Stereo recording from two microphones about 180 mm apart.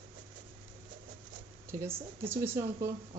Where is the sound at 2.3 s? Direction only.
15° right (ahead or behind).